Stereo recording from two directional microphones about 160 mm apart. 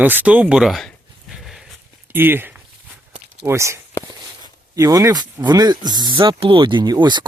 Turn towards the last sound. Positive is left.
turn(degrees=-25)  # may be behind; listen again after turning